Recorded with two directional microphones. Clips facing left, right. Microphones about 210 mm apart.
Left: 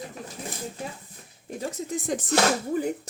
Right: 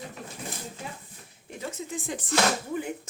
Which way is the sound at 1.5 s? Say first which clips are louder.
Left 4 dB; 40° left (ahead or behind).